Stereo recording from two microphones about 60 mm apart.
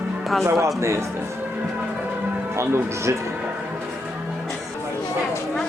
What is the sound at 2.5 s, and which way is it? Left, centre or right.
Speech, right.